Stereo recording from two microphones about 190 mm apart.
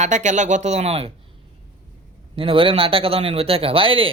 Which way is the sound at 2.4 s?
30° right (ahead or behind).